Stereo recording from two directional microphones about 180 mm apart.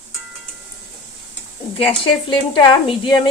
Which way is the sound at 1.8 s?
30° left (ahead or behind).